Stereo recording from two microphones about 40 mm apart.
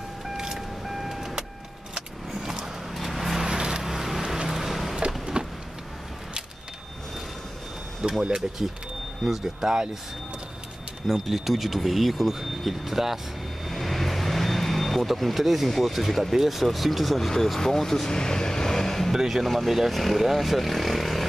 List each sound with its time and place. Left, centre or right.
0.4 s vehicle: centre
2.4 s a sound: centre
3.0 s vehicle: centre
3.4 s vehicle: centre
3.8 s vehicle: centre
5.2 s power windows: centre
8.0 s speech: centre
9.2 s speech: centre
11.1 s speech: centre
19.1 s speech: centre